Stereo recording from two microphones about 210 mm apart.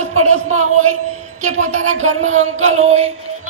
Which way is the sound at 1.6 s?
35° right (ahead or behind).